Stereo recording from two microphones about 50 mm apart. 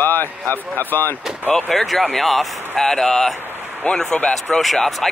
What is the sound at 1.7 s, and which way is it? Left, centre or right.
Speech, centre.